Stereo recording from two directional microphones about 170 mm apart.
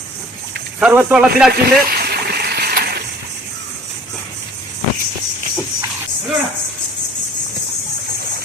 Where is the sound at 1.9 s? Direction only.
65° right (ahead or behind).